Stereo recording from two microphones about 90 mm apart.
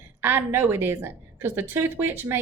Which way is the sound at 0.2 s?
25° right (ahead or behind).